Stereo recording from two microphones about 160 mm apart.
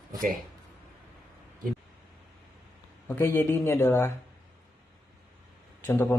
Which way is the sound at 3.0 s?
15° left (ahead or behind).